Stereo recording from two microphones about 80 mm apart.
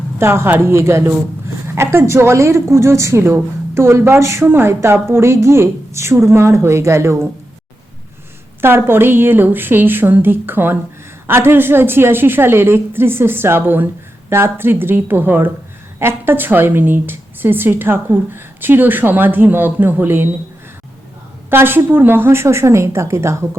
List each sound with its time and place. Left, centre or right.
0.2 s a woman's voice: right
8.6 s a woman's voice: right
21.5 s a woman's voice: right